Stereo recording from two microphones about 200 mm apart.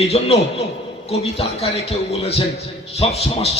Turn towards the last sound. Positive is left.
turn(degrees=30)  # may be behind; listen again after turning